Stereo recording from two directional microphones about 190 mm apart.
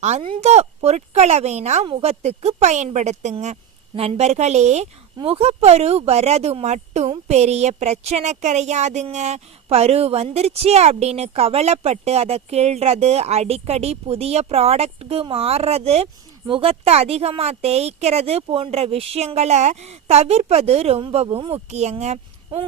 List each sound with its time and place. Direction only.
0.0 s speech: 30° right (ahead or behind)